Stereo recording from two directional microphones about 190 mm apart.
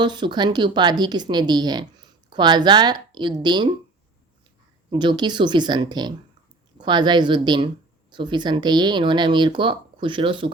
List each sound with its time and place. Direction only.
0.0 s speech: 25° right (ahead or behind)
4.9 s speech: 25° right (ahead or behind)